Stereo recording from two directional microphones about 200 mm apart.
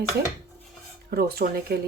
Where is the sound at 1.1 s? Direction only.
50° right (ahead or behind).